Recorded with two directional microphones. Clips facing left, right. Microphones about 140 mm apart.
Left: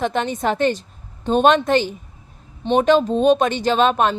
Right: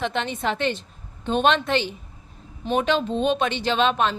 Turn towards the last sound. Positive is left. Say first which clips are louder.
# left 4 dB
turn(degrees=45)  # may be behind; listen again after turning